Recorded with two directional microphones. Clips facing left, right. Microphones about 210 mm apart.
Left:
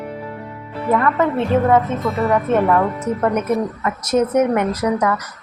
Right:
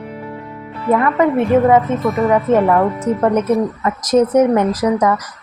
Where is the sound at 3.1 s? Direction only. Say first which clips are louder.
Right 5 dB; 35° right (ahead or behind).